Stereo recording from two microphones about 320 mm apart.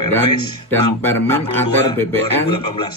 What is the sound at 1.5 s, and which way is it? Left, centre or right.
Speech, centre.